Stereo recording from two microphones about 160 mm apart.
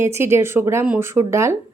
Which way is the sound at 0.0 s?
15° right (ahead or behind).